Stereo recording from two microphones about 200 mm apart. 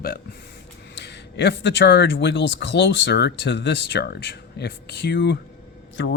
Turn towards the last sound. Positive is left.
turn(degrees=65)  # may be behind; listen again after turning